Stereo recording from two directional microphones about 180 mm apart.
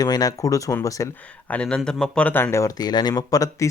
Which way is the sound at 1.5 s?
5° left (ahead or behind).